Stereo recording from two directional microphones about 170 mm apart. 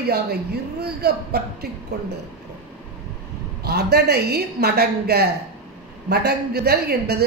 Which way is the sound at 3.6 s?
70° right (ahead or behind).